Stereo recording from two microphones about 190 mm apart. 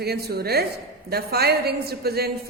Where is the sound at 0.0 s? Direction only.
55° right (ahead or behind).